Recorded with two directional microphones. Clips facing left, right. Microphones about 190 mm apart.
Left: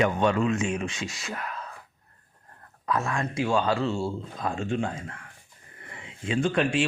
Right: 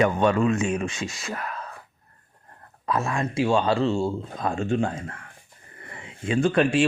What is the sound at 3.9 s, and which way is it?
Speech, 45° right (ahead or behind).